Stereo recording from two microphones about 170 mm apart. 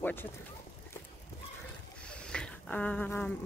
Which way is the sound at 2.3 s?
5° left (ahead or behind).